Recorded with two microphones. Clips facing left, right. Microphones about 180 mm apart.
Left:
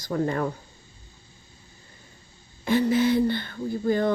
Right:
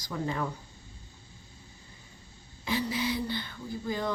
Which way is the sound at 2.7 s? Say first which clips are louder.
Left 10 dB; 55° left (ahead or behind).